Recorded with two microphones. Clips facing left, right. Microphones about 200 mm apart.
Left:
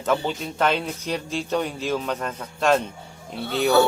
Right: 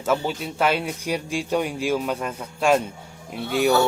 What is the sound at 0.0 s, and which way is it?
Speech, 5° right (ahead or behind).